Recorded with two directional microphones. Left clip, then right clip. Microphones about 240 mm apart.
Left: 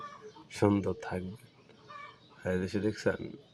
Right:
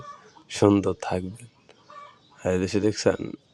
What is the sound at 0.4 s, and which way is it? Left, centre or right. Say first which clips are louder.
Speech: right 9 dB; right.